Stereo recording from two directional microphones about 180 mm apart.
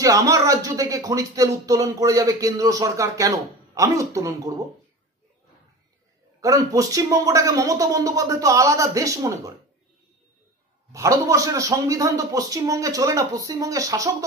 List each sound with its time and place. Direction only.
0.0 s speech: 20° right (ahead or behind)
6.4 s speech: 20° right (ahead or behind)
10.9 s speech: 20° right (ahead or behind)